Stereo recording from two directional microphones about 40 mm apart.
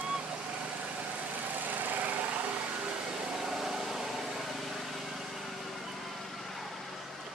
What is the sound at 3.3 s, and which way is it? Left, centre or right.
Vehicle, centre.